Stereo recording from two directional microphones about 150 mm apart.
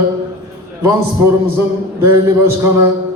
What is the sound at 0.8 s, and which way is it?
A man's voice, 20° right (ahead or behind).